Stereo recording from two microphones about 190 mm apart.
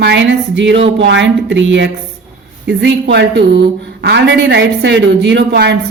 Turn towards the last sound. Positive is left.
turn(degrees=-65)  # may be behind; listen again after turning